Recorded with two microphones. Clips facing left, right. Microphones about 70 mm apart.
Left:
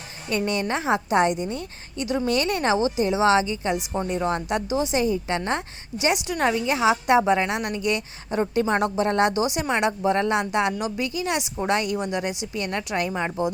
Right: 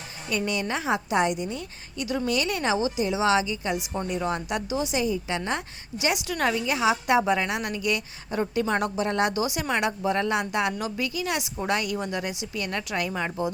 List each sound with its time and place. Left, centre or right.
0.3 s a woman's voice: left
4.9 s a woman's voice: left
5.5 s a woman's voice: left
11.9 s a woman's voice: centre